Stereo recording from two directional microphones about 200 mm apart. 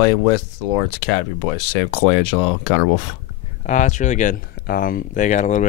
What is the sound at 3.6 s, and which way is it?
Speech, 40° left (ahead or behind).